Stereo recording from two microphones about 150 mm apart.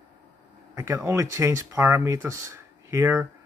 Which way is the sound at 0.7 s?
20° right (ahead or behind).